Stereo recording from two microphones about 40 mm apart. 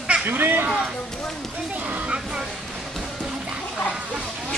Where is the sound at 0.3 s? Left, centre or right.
Right.